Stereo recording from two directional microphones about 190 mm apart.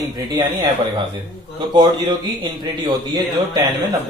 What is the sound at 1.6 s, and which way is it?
A man's voice, 25° right (ahead or behind).